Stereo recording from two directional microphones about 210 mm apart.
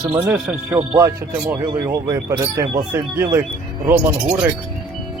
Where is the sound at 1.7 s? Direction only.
15° right (ahead or behind).